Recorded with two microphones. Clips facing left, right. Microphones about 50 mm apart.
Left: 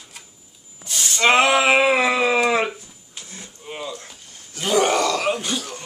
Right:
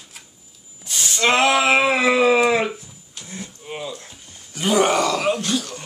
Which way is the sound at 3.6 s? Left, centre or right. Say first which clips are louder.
Left 1 dB; centre.